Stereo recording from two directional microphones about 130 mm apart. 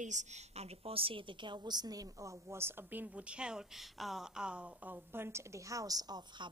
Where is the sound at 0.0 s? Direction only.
65° right (ahead or behind).